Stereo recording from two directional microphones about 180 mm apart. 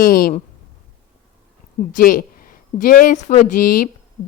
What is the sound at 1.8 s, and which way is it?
A woman's voice, 50° left (ahead or behind).